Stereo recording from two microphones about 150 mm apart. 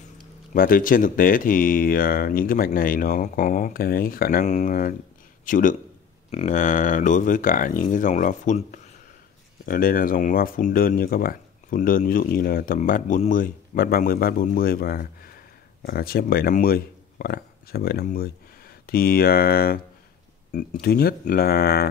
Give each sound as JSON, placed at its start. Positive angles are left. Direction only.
{"t": 0.5, "sound": "a man's voice", "side_deg": 70}
{"t": 9.7, "sound": "speech", "side_deg": 70}
{"t": 20.8, "sound": "speech", "side_deg": 90}